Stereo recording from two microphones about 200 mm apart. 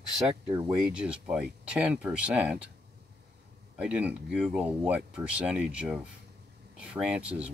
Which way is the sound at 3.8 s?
5° right (ahead or behind).